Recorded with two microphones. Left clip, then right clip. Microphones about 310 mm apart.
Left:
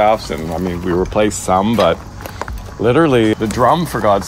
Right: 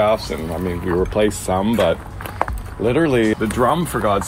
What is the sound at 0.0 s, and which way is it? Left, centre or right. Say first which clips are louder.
Speech: left 4 dB; left.